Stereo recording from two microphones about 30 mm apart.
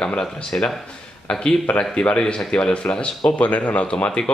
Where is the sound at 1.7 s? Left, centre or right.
Left.